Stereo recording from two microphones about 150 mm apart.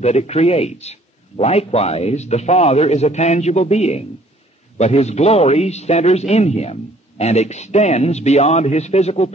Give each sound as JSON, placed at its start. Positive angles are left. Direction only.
{"t": 0.0, "sound": "a man's voice", "side_deg": 45}